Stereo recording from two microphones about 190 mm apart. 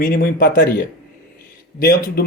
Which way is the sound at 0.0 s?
50° left (ahead or behind).